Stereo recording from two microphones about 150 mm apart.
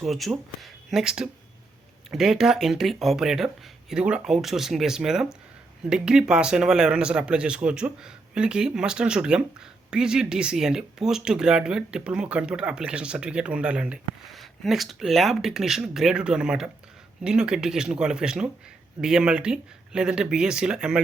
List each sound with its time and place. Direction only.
0.0 s speech: centre (ahead or behind)